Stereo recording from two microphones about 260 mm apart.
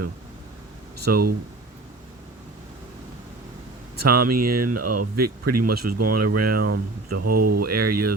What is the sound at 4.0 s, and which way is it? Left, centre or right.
Speech, right.